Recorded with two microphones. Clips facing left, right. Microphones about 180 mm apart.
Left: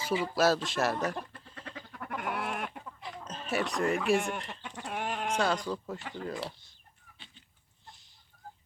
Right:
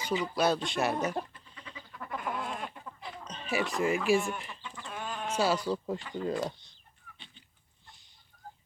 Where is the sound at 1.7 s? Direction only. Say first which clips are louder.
Even; 75° left (ahead or behind).